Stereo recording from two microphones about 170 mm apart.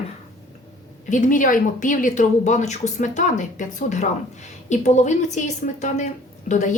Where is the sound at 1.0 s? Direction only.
50° left (ahead or behind).